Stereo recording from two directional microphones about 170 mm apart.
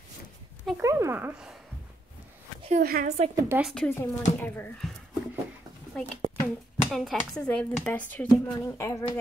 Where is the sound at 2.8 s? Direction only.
60° right (ahead or behind).